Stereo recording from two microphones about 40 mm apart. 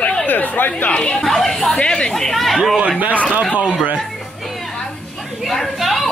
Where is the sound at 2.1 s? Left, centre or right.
Centre.